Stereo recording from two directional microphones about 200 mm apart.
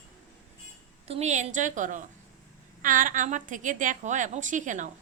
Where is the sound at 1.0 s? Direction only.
30° right (ahead or behind).